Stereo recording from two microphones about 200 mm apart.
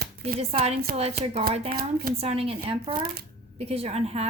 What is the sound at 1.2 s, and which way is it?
A woman's voice, 30° right (ahead or behind).